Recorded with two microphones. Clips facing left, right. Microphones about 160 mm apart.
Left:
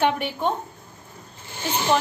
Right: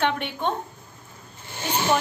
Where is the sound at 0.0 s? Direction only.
10° left (ahead or behind).